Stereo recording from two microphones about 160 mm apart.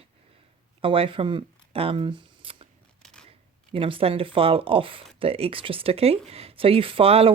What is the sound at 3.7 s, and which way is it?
Speech, 35° right (ahead or behind).